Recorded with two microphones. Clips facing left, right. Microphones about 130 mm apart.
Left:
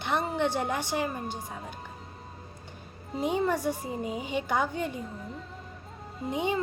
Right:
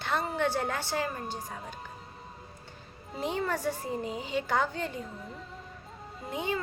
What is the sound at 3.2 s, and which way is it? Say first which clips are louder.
A woman's voice: left 4 dB; 15° left (ahead or behind).